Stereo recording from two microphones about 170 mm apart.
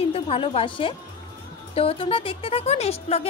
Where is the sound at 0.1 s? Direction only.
35° left (ahead or behind).